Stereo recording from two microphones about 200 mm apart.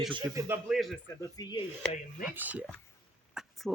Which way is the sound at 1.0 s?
15° left (ahead or behind).